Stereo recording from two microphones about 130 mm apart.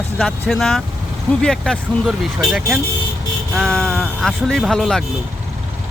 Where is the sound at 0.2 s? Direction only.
5° left (ahead or behind).